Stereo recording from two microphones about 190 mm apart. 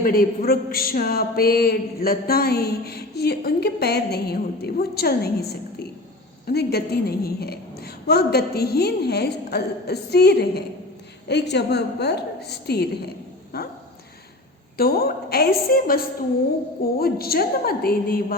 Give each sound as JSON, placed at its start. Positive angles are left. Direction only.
{"t": 0.0, "sound": "speech", "side_deg": 50}
{"t": 6.5, "sound": "speech", "side_deg": 55}
{"t": 13.5, "sound": "dog", "side_deg": 55}
{"t": 14.8, "sound": "a woman's voice", "side_deg": 55}